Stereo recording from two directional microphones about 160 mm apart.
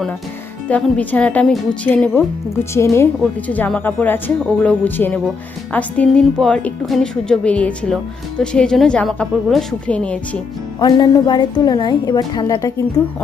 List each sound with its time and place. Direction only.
0.7 s a woman's voice: 10° left (ahead or behind)
10.8 s a woman's voice: 25° left (ahead or behind)